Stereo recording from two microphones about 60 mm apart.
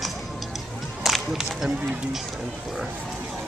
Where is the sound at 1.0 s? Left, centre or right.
Centre.